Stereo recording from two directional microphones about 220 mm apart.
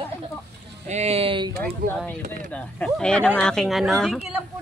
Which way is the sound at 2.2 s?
40° right (ahead or behind).